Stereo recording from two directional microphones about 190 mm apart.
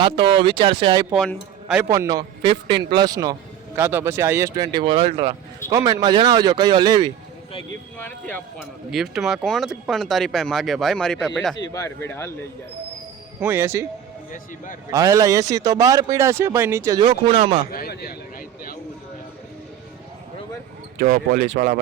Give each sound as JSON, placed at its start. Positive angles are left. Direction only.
{"t": 0.0, "sound": "speech", "side_deg": -25}
{"t": 1.1, "sound": "speech", "side_deg": 0}
{"t": 1.9, "sound": "speech", "side_deg": -20}
{"t": 5.6, "sound": "speech", "side_deg": -20}
{"t": 8.9, "sound": "speech", "side_deg": 0}
{"t": 11.5, "sound": "speech", "side_deg": 20}
{"t": 13.4, "sound": "speech", "side_deg": -10}
{"t": 14.3, "sound": "a man's voice", "side_deg": 45}
{"t": 14.8, "sound": "speech", "side_deg": -15}
{"t": 17.7, "sound": "a sound", "side_deg": 50}
{"t": 21.0, "sound": "speech", "side_deg": -45}